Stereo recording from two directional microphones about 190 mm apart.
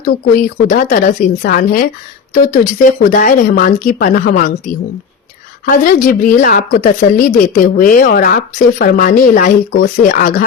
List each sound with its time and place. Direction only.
0.0 s a woman's voice: 45° left (ahead or behind)
5.7 s a woman's voice: 45° left (ahead or behind)